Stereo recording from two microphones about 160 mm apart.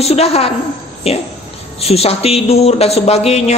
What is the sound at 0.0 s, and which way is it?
Speech, 40° left (ahead or behind).